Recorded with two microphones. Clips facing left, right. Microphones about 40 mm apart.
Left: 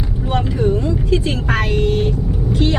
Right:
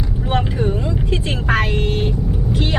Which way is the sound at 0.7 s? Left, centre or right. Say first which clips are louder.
Left 4 dB; right.